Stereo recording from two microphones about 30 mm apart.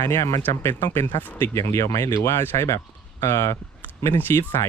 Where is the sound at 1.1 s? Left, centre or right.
Left.